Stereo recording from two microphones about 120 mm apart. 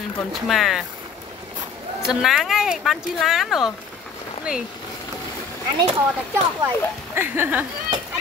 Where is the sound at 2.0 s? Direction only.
Centre (ahead or behind).